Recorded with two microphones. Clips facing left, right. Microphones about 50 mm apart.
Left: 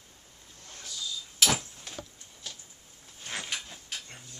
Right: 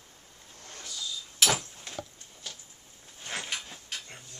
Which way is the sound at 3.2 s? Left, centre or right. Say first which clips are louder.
Right 1 dB; centre.